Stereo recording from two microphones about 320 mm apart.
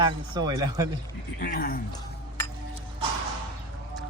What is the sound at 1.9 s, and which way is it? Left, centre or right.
Dishes, centre.